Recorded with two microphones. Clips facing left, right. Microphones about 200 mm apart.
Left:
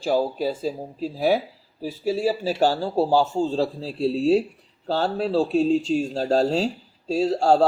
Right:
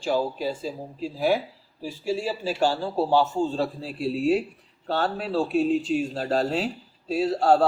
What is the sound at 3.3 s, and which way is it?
Speech, 25° left (ahead or behind).